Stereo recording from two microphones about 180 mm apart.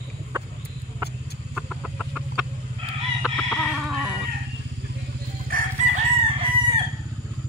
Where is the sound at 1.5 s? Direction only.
Centre (ahead or behind).